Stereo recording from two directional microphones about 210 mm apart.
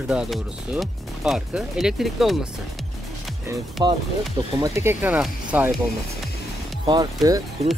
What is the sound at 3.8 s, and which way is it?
Speech, 20° right (ahead or behind).